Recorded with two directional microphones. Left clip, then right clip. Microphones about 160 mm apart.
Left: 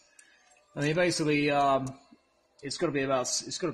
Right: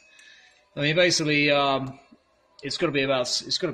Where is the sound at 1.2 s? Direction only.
10° left (ahead or behind).